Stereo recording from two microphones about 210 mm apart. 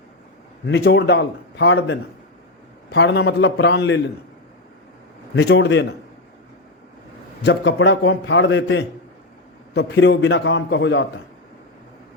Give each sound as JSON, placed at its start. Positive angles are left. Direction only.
{"t": 0.7, "sound": "a man's voice", "side_deg": 55}
{"t": 5.3, "sound": "a man's voice", "side_deg": 55}
{"t": 7.4, "sound": "a man's voice", "side_deg": 60}